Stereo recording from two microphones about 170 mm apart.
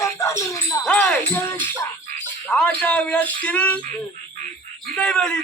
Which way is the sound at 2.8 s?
5° left (ahead or behind).